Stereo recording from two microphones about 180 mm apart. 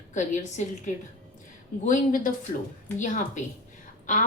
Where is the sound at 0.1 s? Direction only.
40° left (ahead or behind).